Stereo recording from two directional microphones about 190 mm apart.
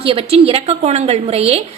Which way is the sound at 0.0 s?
30° right (ahead or behind).